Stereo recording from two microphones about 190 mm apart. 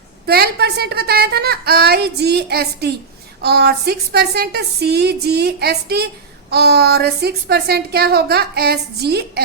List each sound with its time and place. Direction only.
0.3 s a woman's voice: 55° right (ahead or behind)